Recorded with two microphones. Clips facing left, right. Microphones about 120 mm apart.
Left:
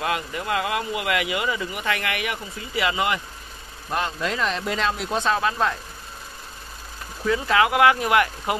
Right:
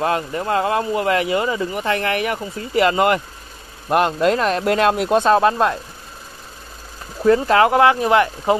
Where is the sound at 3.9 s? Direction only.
60° right (ahead or behind).